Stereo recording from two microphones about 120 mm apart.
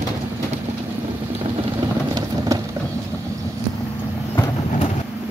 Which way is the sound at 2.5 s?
25° right (ahead or behind).